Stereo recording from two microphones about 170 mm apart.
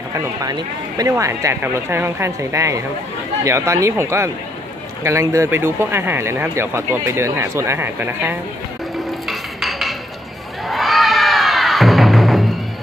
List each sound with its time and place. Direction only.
0.1 s speech: 20° right (ahead or behind)
9.3 s music: centre (ahead or behind)